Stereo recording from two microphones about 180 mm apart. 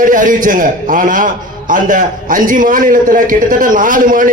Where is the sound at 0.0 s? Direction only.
45° right (ahead or behind).